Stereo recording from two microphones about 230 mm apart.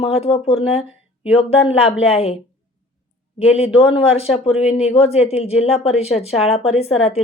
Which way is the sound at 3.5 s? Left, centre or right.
Left.